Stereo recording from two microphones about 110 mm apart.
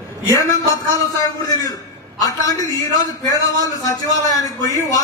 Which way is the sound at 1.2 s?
35° left (ahead or behind).